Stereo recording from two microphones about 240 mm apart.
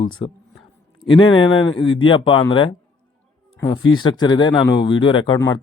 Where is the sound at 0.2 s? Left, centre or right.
Left.